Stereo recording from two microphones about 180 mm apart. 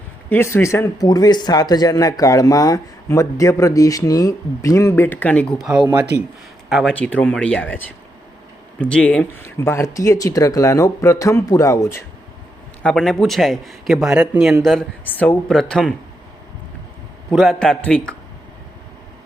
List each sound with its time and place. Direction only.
0.3 s speech: 15° left (ahead or behind)
12.8 s speech: centre (ahead or behind)
17.3 s speech: centre (ahead or behind)